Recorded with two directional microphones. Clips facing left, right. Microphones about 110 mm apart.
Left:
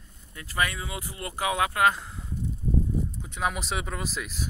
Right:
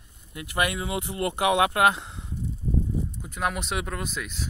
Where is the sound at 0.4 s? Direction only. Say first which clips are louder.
Right 2 dB; 20° right (ahead or behind).